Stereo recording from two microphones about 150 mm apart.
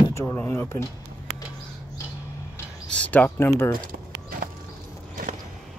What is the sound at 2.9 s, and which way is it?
Speech, 10° left (ahead or behind).